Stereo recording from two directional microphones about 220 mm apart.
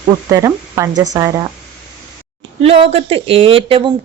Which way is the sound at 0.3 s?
15° right (ahead or behind).